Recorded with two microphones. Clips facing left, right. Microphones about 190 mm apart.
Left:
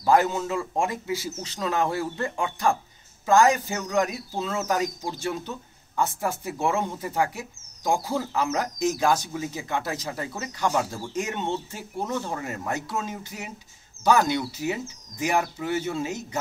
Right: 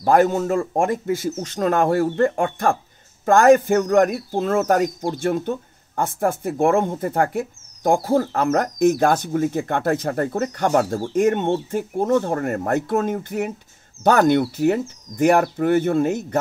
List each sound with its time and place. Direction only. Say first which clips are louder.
0.0 s speech: right 5 dB; 50° right (ahead or behind)